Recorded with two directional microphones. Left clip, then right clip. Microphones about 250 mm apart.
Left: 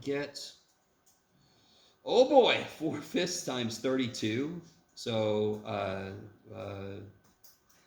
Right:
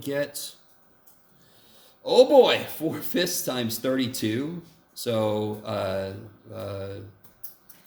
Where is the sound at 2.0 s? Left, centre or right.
Right.